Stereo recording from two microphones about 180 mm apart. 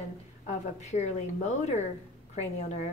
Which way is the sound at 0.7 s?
40° left (ahead or behind).